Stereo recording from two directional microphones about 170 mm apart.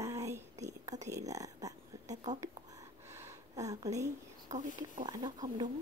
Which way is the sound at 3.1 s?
15° right (ahead or behind).